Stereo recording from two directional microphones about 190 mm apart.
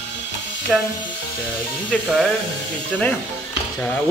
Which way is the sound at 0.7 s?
Centre (ahead or behind).